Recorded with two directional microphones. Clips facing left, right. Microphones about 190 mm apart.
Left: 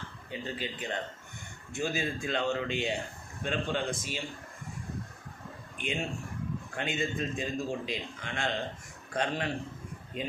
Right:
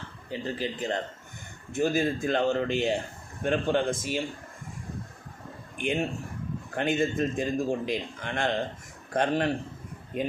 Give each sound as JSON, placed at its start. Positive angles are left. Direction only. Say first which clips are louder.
{"t": 0.3, "sound": "a man's voice", "louder": "right 6 dB", "side_deg": -40}
{"t": 5.8, "sound": "a man's voice", "louder": "right 6 dB", "side_deg": -50}